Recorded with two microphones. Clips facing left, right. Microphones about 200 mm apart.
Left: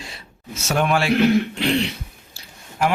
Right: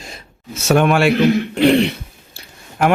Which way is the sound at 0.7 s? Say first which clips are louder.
Right 6 dB; 65° right (ahead or behind).